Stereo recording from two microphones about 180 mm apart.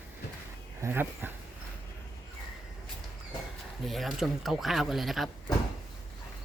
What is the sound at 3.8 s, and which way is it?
Speech, centre (ahead or behind).